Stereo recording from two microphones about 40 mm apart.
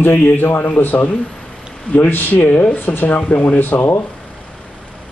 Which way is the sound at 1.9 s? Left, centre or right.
Left.